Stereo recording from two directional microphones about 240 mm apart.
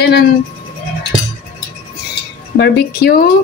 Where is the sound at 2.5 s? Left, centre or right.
Left.